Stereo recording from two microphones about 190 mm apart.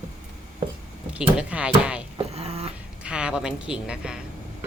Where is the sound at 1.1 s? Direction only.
5° right (ahead or behind).